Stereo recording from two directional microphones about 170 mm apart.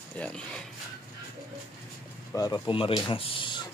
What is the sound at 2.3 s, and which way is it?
Speech, 20° left (ahead or behind).